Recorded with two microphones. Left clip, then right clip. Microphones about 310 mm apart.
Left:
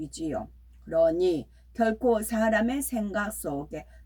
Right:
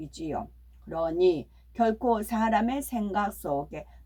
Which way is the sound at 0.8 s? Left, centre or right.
Centre.